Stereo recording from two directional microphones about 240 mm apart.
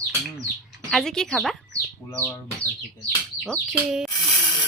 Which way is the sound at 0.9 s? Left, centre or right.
Centre.